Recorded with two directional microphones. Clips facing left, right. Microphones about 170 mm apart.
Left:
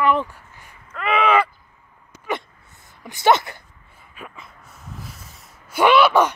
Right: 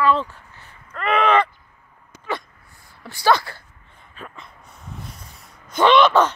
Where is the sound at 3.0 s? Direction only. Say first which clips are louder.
Left 1 dB; 20° left (ahead or behind).